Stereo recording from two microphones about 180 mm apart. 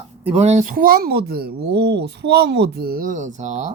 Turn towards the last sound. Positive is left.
turn(degrees=-40)  # may be behind; listen again after turning